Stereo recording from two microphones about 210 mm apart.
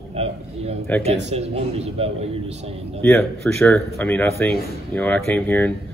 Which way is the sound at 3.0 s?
5° left (ahead or behind).